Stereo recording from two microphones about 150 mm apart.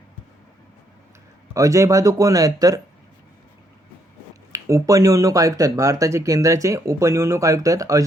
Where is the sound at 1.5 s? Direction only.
20° right (ahead or behind).